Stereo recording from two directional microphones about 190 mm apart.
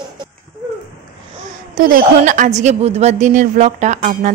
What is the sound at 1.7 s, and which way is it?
A woman's voice, 45° right (ahead or behind).